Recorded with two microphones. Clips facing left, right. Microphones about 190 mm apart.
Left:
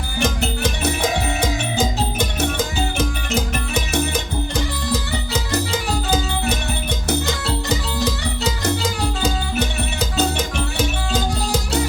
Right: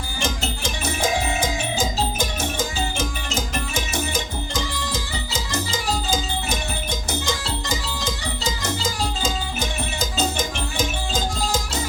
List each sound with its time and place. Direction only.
0.2 s music: 60° left (ahead or behind)